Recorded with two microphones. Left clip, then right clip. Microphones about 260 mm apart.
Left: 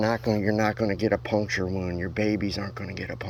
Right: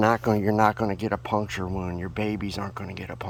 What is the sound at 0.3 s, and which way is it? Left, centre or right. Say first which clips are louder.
Speech: right 3 dB; right.